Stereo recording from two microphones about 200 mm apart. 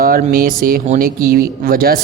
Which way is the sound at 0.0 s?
45° right (ahead or behind).